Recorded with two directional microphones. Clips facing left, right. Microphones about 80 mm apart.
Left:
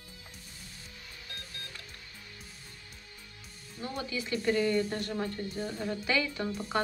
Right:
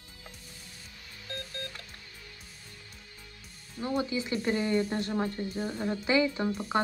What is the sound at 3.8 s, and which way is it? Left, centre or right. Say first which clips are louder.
Speech: right 6 dB; right.